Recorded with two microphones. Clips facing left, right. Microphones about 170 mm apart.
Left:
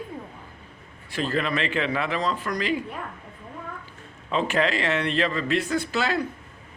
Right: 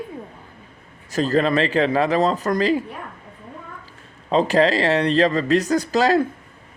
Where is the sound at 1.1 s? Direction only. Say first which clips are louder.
Right 7 dB; 40° right (ahead or behind).